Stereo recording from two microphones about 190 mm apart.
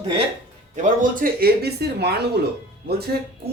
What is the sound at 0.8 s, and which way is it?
Speech, 40° right (ahead or behind).